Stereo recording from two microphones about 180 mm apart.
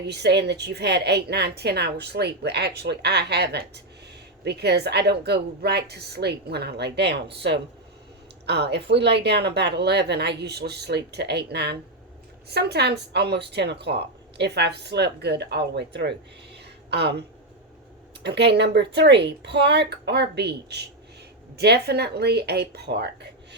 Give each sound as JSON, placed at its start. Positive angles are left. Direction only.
{"t": 0.1, "sound": "speech", "side_deg": -70}
{"t": 8.4, "sound": "speech", "side_deg": -65}